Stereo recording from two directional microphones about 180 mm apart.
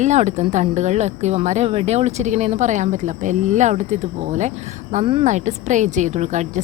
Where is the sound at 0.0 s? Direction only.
40° right (ahead or behind).